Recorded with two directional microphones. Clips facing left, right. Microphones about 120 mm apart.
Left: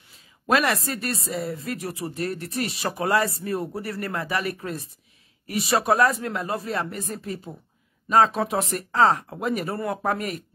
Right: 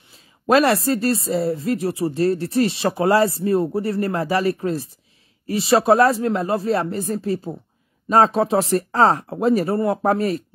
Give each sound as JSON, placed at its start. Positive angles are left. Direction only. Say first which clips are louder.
{"t": 0.1, "sound": "speech", "louder": "right 6 dB", "side_deg": -30}